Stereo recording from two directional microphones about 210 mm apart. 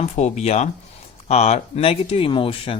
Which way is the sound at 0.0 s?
35° left (ahead or behind).